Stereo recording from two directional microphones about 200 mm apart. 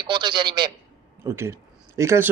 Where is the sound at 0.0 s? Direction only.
25° right (ahead or behind).